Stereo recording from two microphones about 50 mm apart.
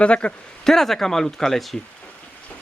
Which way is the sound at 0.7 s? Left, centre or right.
Centre.